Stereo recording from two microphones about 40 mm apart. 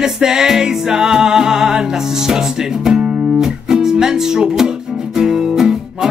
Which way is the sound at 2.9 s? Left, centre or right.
Right.